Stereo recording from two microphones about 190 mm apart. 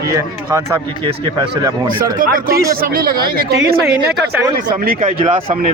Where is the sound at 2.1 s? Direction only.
50° right (ahead or behind).